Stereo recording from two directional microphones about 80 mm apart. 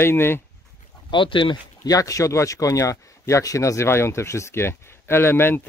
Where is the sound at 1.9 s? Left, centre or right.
Left.